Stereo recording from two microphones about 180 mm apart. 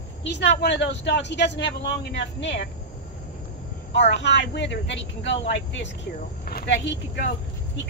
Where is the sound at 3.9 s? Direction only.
70° left (ahead or behind).